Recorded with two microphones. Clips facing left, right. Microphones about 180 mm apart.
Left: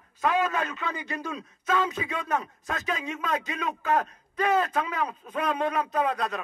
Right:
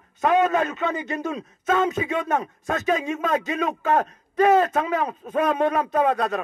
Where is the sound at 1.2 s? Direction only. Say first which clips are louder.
Right 5 dB; 45° right (ahead or behind).